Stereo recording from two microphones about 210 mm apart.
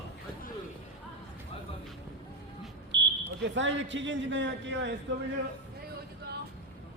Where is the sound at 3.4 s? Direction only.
60° right (ahead or behind).